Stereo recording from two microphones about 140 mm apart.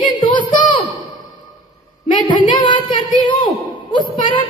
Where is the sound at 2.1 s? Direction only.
35° left (ahead or behind).